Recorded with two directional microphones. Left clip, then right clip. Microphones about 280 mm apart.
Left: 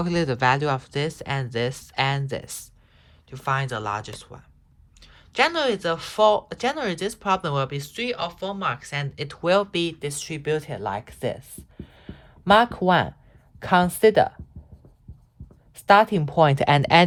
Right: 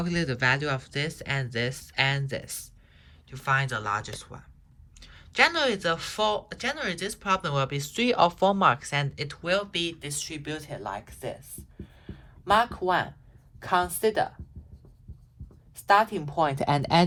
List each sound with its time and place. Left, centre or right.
0.0 s a woman's voice: centre; by 14.3 s left
15.7 s a woman's voice: left